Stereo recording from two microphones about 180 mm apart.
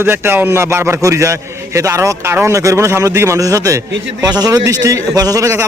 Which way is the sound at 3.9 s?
90° right.